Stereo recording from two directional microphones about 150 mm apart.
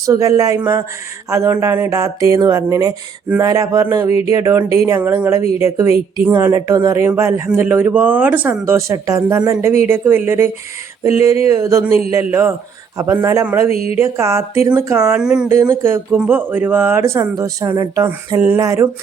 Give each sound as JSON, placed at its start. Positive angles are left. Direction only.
{"t": 0.0, "sound": "speech", "side_deg": -20}
{"t": 15.1, "sound": "speech", "side_deg": -5}
{"t": 15.4, "sound": "speech", "side_deg": -15}